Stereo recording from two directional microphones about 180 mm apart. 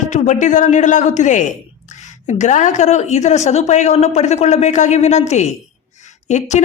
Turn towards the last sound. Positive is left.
turn(degrees=40)  # may be behind; listen again after turning